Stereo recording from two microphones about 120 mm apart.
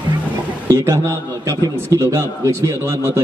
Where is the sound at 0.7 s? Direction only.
25° right (ahead or behind).